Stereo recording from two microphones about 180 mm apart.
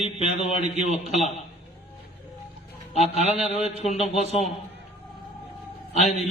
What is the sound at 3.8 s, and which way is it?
Speech, 35° left (ahead or behind).